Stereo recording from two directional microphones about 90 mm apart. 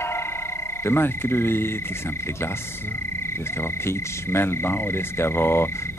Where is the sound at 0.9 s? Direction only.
25° left (ahead or behind).